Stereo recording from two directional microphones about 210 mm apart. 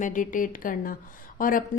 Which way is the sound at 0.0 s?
40° left (ahead or behind).